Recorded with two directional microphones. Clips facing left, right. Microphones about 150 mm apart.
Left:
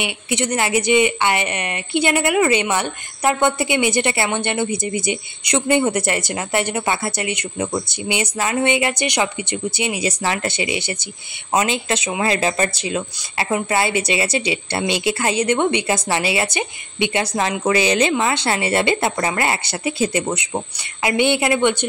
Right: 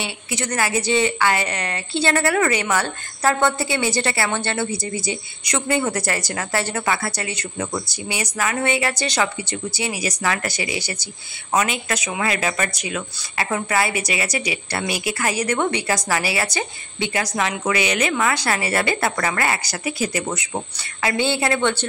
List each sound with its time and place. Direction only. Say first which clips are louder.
0.0 s a woman's voice: left 5 dB; 20° left (ahead or behind)